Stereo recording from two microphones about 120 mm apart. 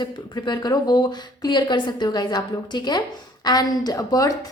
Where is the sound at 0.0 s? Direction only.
35° left (ahead or behind).